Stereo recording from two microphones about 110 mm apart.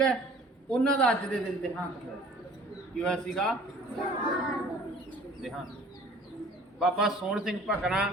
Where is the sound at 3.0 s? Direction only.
5° left (ahead or behind).